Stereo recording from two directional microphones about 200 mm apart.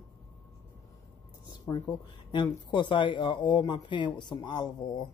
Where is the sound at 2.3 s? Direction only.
25° left (ahead or behind).